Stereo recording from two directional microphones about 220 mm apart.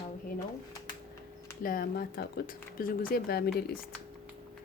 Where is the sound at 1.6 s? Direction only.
40° left (ahead or behind).